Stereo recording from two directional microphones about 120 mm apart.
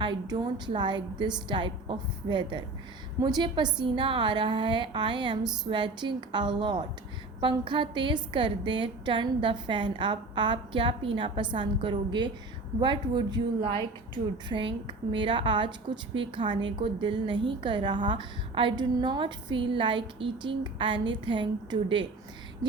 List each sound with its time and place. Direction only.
0.0 s a woman's voice: 35° right (ahead or behind)